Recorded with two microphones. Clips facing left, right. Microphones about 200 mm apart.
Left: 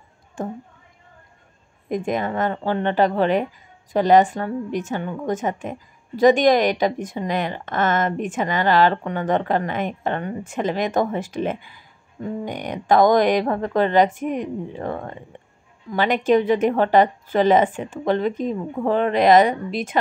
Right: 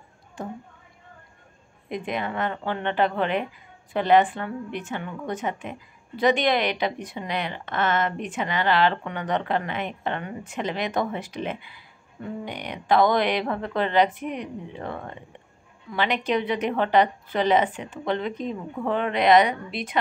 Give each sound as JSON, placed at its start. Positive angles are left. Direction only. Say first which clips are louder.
{"t": 0.4, "sound": "a woman's voice", "louder": "left 6 dB", "side_deg": 50}
{"t": 1.9, "sound": "a woman's voice", "louder": "left 6 dB", "side_deg": 45}